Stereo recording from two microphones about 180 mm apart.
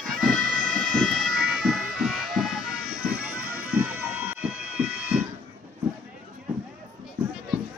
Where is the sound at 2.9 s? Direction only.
55° right (ahead or behind).